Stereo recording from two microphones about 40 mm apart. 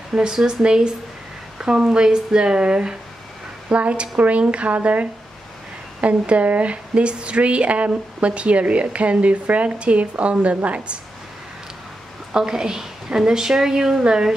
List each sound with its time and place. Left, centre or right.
0.1 s a woman's voice: centre; by 11.0 s right
12.3 s a woman's voice: centre